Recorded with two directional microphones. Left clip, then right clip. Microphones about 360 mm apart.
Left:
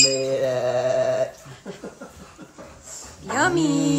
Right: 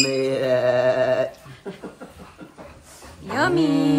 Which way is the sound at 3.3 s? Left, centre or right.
Centre.